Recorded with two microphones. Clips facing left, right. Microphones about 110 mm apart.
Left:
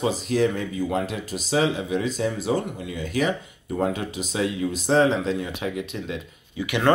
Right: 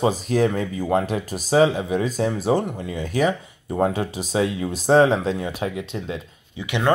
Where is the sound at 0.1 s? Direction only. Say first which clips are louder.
Right 2 dB; 45° right (ahead or behind).